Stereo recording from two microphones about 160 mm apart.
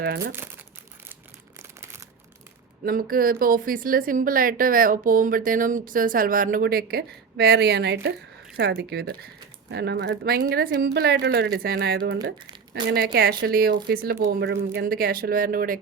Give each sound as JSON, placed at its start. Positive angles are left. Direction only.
{"t": 0.0, "sound": "speech", "side_deg": -90}
{"t": 2.8, "sound": "speech", "side_deg": -65}
{"t": 14.8, "sound": "speech", "side_deg": -70}